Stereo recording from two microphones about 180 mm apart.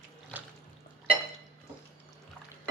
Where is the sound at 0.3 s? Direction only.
10° right (ahead or behind).